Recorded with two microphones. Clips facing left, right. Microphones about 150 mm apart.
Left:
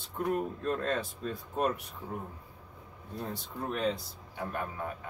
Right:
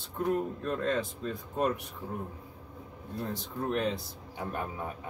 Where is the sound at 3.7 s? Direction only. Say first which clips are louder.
Right 1 dB; 5° right (ahead or behind).